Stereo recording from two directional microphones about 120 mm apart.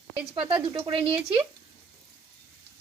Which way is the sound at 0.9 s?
45° right (ahead or behind).